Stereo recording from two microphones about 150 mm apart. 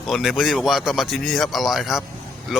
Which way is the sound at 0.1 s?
Centre (ahead or behind).